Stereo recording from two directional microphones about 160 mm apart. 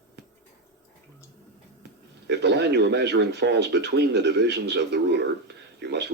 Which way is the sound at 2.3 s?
90° right.